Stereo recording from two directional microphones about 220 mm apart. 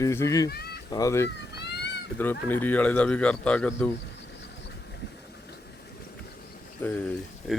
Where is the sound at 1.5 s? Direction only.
50° left (ahead or behind).